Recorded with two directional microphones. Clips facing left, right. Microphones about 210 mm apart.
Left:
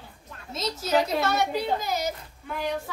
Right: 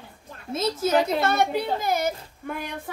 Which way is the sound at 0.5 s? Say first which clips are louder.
Right 3 dB; 55° right (ahead or behind).